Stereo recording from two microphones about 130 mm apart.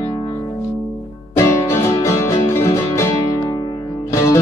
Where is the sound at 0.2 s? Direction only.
25° left (ahead or behind).